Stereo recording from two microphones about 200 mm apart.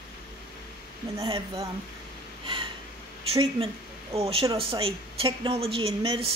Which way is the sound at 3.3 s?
25° right (ahead or behind).